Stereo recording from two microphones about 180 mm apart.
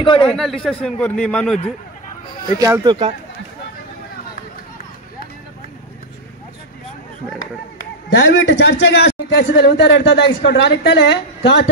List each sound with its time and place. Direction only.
0.0 s a man's voice: 30° left (ahead or behind)
0.4 s a man's voice: centre (ahead or behind)
2.6 s speech: 20° right (ahead or behind)
8.2 s a man's voice: 85° left